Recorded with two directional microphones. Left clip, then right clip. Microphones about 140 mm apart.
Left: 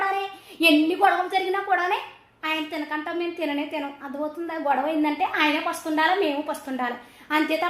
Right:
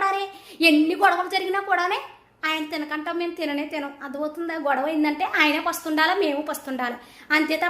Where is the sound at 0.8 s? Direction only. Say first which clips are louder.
Right 1 dB; 30° right (ahead or behind).